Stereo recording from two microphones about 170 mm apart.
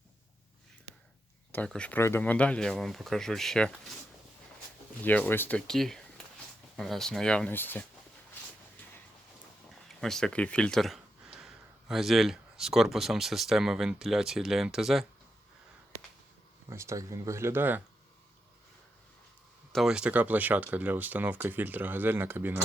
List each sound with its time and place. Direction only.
1.5 s speech: 5° left (ahead or behind)
5.0 s speech: 10° left (ahead or behind)
10.0 s speech: 5° left (ahead or behind)
16.6 s speech: 15° right (ahead or behind)
19.7 s speech: 5° right (ahead or behind)